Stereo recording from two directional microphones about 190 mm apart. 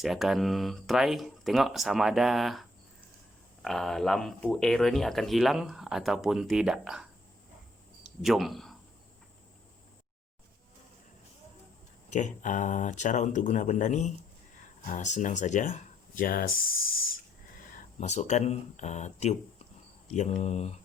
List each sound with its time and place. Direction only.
0.0 s speech: centre (ahead or behind)
8.2 s speech: centre (ahead or behind)
12.1 s speech: 40° left (ahead or behind)
18.0 s speech: 35° left (ahead or behind)